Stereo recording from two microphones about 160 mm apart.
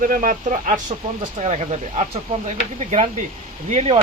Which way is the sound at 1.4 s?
45° right (ahead or behind).